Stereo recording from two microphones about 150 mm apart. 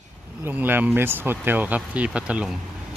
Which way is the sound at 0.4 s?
10° right (ahead or behind).